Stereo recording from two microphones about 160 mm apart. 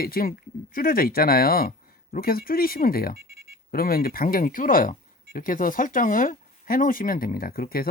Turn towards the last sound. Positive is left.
turn(degrees=70)  # may be behind; listen again after turning